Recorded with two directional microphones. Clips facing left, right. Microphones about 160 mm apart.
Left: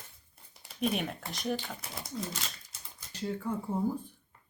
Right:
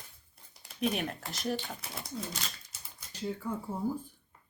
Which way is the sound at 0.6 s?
Centre (ahead or behind).